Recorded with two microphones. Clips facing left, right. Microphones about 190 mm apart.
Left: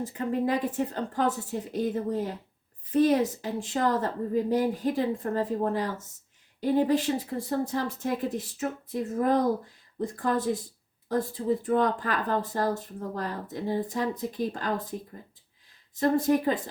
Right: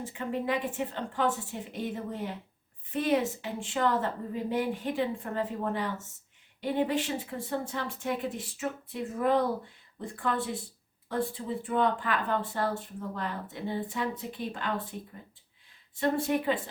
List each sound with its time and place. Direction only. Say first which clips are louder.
0.0 s speech: left 5 dB; 40° left (ahead or behind)
16.0 s speech: left 4 dB; 40° left (ahead or behind)